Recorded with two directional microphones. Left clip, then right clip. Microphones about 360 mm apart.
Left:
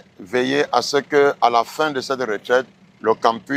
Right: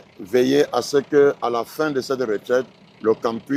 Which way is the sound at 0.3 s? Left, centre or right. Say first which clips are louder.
Right 1 dB; left.